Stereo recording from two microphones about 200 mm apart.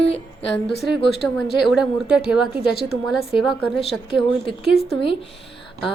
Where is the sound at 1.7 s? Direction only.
5° right (ahead or behind).